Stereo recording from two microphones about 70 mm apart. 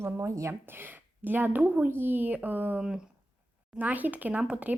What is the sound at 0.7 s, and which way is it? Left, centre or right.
Speech, right.